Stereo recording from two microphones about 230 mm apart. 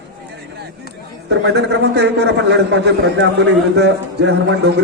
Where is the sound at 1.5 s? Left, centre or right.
Right.